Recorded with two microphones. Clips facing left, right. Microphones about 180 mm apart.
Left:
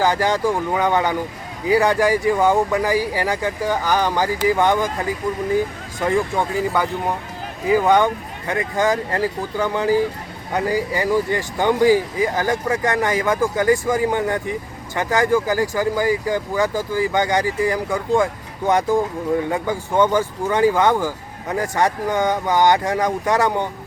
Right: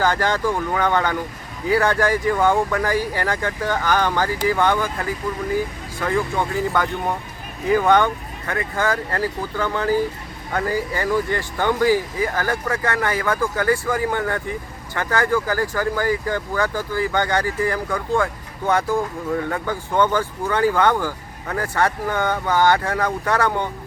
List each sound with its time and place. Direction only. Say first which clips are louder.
0.0 s speech: left 2 dB; 10° left (ahead or behind)
7.7 s speech: left 1 dB; 10° left (ahead or behind)